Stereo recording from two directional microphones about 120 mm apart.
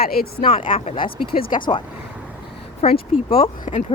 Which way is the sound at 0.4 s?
45° left (ahead or behind).